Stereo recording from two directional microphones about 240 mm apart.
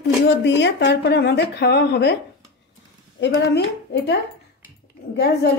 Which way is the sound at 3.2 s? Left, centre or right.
Left.